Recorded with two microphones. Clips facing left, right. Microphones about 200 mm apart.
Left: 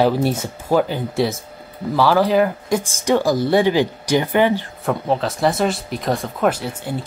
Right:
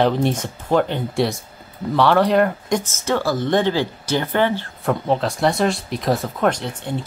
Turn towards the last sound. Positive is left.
turn(degrees=5)  # may be behind; listen again after turning